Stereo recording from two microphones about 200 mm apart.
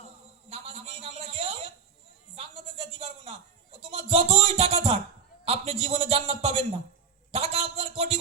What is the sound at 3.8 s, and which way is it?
Music, 30° right (ahead or behind).